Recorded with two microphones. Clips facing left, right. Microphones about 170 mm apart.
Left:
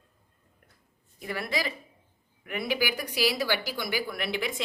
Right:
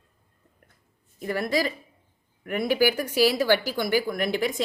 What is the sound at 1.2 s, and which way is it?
Speech, 45° right (ahead or behind).